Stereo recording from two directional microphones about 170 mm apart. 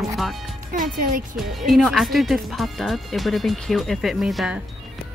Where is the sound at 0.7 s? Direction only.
55° right (ahead or behind).